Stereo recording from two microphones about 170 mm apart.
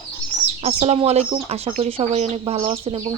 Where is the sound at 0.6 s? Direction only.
40° right (ahead or behind).